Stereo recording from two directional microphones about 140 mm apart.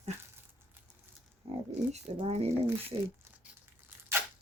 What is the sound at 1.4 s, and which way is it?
Speech, 45° right (ahead or behind).